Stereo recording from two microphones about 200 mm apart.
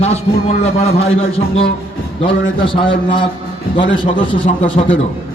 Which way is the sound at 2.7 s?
25° left (ahead or behind).